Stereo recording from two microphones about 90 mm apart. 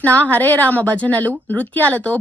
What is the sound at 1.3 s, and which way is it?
Speech, 20° right (ahead or behind).